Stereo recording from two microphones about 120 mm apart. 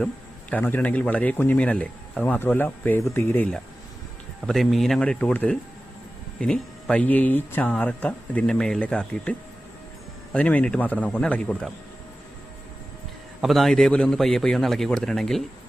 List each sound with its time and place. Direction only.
0.5 s speech: 15° left (ahead or behind)
4.4 s a man's voice: centre (ahead or behind)
10.3 s speech: 10° left (ahead or behind)
13.4 s a man's voice: centre (ahead or behind)